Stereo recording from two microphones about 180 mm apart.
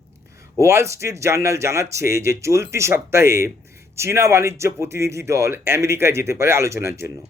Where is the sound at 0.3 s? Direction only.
15° right (ahead or behind).